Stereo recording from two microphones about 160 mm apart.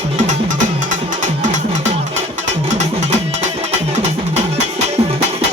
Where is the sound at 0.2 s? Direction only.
50° right (ahead or behind).